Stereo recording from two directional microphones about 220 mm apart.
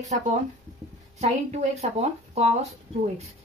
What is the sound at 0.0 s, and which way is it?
Speech, 30° right (ahead or behind).